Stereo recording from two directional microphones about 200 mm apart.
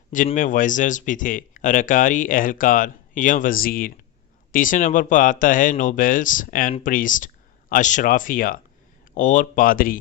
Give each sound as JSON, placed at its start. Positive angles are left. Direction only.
{"t": 0.3, "sound": "speech", "side_deg": 40}